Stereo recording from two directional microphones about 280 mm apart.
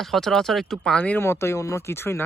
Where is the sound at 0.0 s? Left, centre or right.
Centre.